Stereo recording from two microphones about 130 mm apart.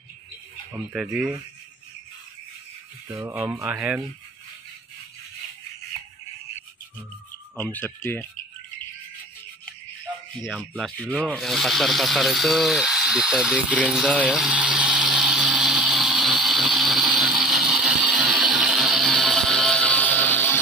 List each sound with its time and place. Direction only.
0.7 s speech: 5° right (ahead or behind)
3.4 s speech: 15° right (ahead or behind)
7.5 s speech: 15° left (ahead or behind)
10.7 s speech: 10° left (ahead or behind)
14.2 s a sound: 5° right (ahead or behind); by 20.5 s 15° left (ahead or behind)